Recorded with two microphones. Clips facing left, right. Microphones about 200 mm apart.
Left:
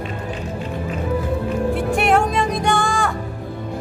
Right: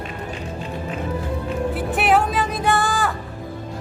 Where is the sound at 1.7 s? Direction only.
5° right (ahead or behind).